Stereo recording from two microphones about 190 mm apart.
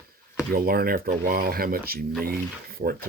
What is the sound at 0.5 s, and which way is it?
Speech, 50° right (ahead or behind).